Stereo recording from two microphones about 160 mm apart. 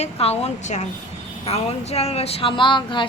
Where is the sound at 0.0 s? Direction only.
40° left (ahead or behind).